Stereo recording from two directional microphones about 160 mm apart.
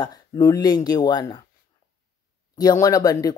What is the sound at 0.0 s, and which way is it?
Speech, 20° left (ahead or behind).